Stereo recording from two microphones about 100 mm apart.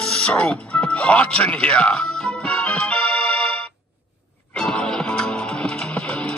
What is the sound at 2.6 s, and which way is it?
Music, 10° left (ahead or behind).